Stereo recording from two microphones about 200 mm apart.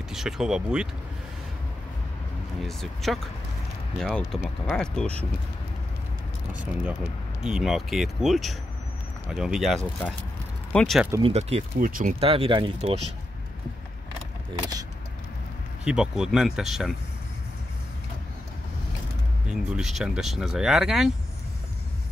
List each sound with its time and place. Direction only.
0.1 s speech: centre (ahead or behind)
2.6 s speech: centre (ahead or behind)
6.6 s speech: 5° right (ahead or behind)
11.2 s speech: 30° right (ahead or behind)
12.2 s speech: 25° right (ahead or behind)
14.5 s speech: 20° right (ahead or behind)
15.8 s speech: 5° right (ahead or behind)
19.5 s speech: centre (ahead or behind)